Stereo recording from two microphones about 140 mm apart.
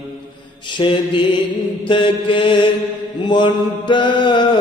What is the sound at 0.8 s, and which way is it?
Mantra, 35° left (ahead or behind).